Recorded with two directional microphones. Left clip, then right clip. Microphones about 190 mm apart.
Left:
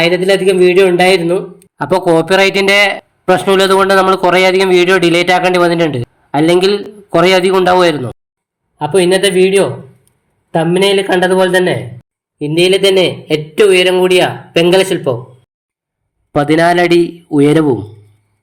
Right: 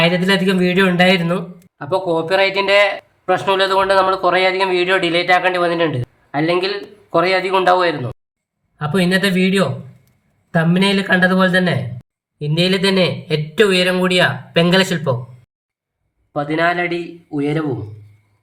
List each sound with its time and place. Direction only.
0.0 s a man's voice: 15° left (ahead or behind)
1.8 s a man's voice: 40° left (ahead or behind)
8.8 s a man's voice: centre (ahead or behind)
12.7 s a man's voice: 20° left (ahead or behind)
16.3 s a man's voice: 40° left (ahead or behind)